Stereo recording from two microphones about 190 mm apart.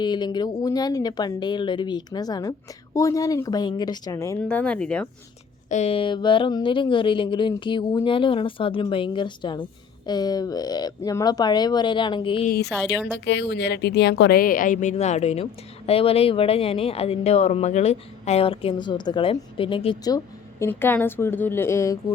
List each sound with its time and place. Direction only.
0.0 s speech: 25° left (ahead or behind); by 5.0 s 5° left (ahead or behind)
5.6 s speech: 35° left (ahead or behind)
12.5 s a woman's voice: 60° left (ahead or behind)
13.1 s a woman's voice: 70° left (ahead or behind); by 21.9 s 15° left (ahead or behind)